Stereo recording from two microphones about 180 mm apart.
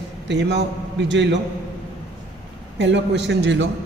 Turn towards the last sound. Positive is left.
turn(degrees=-75)  # may be behind; listen again after turning